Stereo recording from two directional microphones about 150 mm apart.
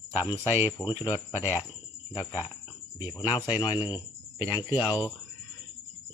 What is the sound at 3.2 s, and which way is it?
Speech, 30° left (ahead or behind).